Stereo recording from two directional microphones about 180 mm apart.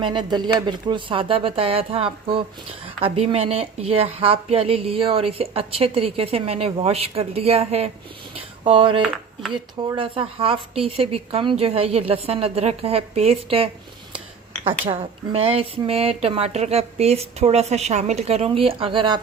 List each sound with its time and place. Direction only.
0.0 s speech: 25° right (ahead or behind)